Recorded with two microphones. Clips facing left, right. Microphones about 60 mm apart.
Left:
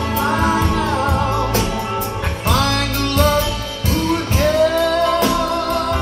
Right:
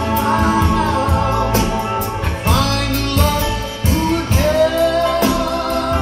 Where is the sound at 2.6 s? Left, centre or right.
Left.